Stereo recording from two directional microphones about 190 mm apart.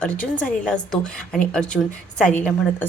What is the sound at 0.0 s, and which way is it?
A woman's voice, 5° left (ahead or behind).